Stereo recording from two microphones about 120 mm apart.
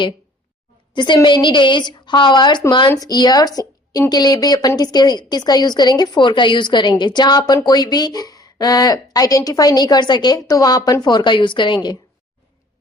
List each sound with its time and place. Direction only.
0.9 s a woman's voice: 40° left (ahead or behind)